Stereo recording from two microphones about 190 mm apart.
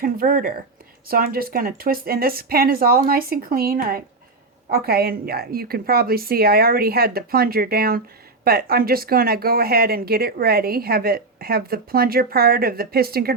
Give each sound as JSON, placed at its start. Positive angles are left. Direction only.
{"t": 0.0, "sound": "speech", "side_deg": -50}